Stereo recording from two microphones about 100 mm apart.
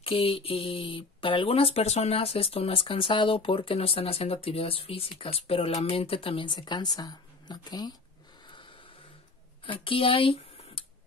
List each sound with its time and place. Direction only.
0.0 s a woman's voice: 70° left (ahead or behind); by 7.9 s 40° left (ahead or behind)
9.7 s speech: 65° left (ahead or behind)